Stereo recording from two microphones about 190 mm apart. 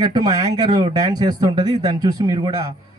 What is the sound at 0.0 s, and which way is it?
Speech, 20° right (ahead or behind).